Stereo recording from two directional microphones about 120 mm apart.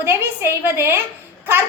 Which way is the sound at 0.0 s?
20° right (ahead or behind).